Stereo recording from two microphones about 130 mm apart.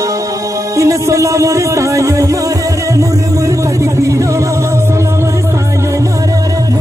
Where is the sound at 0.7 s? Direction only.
25° right (ahead or behind).